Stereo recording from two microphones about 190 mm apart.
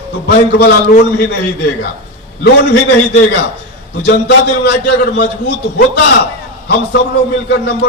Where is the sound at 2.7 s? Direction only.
60° left (ahead or behind).